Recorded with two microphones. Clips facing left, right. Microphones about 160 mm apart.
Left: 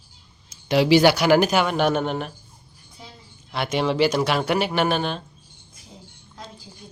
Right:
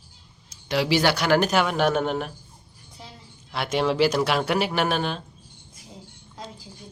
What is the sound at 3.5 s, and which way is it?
Speech, centre (ahead or behind).